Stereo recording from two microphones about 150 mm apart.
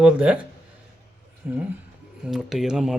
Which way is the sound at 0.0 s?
10° right (ahead or behind).